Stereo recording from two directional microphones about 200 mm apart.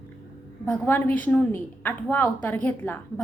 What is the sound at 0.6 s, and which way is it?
A woman's voice, 10° left (ahead or behind).